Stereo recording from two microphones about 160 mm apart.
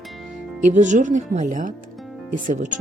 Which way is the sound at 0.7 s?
50° right (ahead or behind).